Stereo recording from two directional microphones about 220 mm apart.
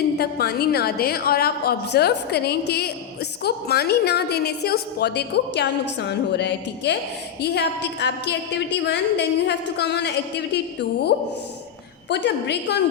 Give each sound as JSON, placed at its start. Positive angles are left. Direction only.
{"t": 0.2, "sound": "a woman's voice", "side_deg": 45}